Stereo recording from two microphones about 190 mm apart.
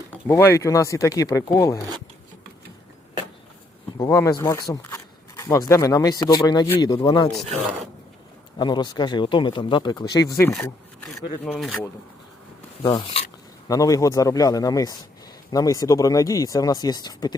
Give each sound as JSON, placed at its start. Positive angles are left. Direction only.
{"t": 0.1, "sound": "speech", "side_deg": 10}
{"t": 4.0, "sound": "speech", "side_deg": 15}
{"t": 7.3, "sound": "speech", "side_deg": 0}
{"t": 8.5, "sound": "speech", "side_deg": 25}
{"t": 11.4, "sound": "speech", "side_deg": 0}
{"t": 12.8, "sound": "speech", "side_deg": 25}